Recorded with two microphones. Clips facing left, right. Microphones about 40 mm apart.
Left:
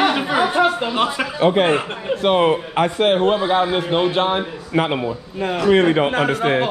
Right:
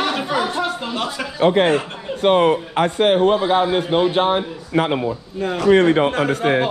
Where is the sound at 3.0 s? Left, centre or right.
Left.